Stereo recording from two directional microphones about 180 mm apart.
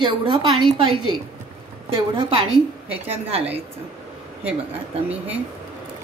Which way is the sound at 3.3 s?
35° right (ahead or behind).